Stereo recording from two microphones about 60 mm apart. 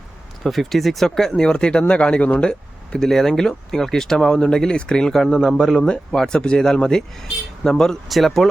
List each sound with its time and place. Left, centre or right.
0.4 s speech: centre